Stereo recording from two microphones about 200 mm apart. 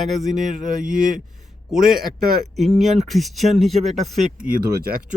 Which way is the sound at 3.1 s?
Centre (ahead or behind).